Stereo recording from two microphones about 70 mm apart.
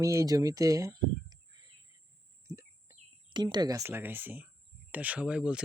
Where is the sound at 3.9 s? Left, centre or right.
Right; by 5.6 s centre.